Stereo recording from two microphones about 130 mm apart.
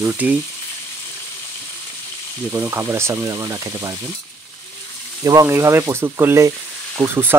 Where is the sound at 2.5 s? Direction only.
15° right (ahead or behind).